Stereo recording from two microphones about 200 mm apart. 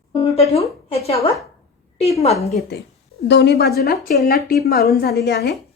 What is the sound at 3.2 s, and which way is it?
Speech, 60° left (ahead or behind).